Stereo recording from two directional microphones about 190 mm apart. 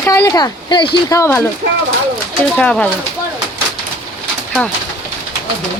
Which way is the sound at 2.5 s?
5° left (ahead or behind).